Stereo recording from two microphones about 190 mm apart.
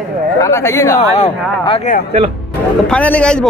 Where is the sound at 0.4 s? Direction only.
15° left (ahead or behind).